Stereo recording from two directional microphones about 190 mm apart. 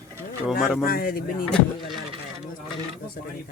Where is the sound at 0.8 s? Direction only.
50° left (ahead or behind).